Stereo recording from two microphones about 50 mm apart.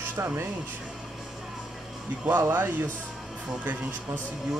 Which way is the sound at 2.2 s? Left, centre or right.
Right.